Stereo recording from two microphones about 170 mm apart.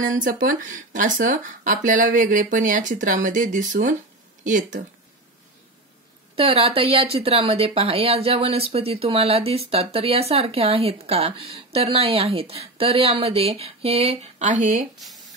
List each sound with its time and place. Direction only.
0.0 s speech: 50° right (ahead or behind)
6.3 s speech: 35° right (ahead or behind)